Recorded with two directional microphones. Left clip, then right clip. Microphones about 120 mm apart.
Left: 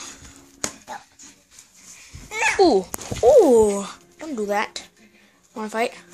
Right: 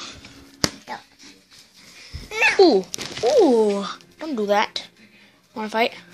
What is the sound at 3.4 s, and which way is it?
Speech, 35° left (ahead or behind).